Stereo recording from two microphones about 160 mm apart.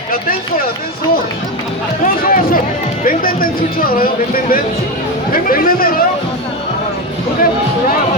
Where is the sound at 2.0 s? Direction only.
60° left (ahead or behind).